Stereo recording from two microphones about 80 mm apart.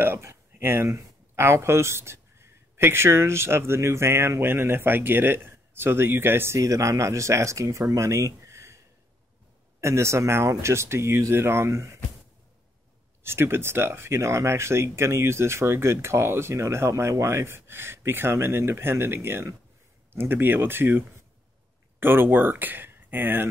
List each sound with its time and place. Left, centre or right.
0.0 s speech: right
7.9 s a sound: right
9.8 s speech: right
13.2 s speech: right
22.0 s speech: right